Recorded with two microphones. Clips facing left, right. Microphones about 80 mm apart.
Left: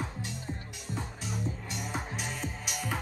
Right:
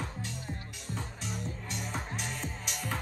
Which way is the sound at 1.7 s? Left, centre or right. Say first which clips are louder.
Left 1 dB; centre.